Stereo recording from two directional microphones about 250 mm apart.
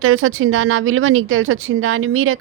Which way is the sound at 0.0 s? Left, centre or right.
Right.